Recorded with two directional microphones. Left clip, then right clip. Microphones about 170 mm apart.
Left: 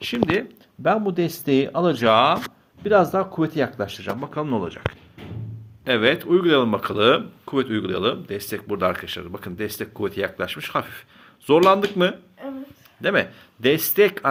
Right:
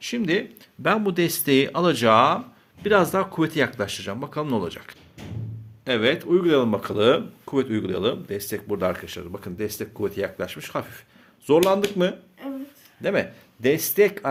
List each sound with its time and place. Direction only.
0.0 s speech: centre (ahead or behind)
13.0 s speech: 10° right (ahead or behind)